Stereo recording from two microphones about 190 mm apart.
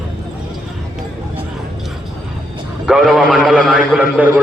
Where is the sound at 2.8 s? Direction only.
5° right (ahead or behind).